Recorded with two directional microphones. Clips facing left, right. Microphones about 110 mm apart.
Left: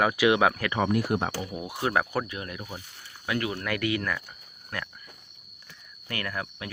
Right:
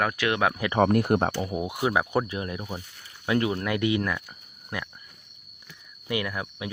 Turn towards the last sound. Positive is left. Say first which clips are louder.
# right 2 dB
turn(degrees=-15)  # may be behind; listen again after turning